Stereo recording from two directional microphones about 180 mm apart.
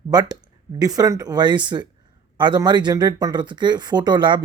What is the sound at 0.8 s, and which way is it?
Speech, 20° right (ahead or behind).